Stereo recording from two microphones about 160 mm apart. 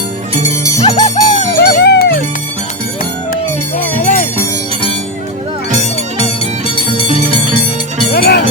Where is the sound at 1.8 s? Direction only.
90° left.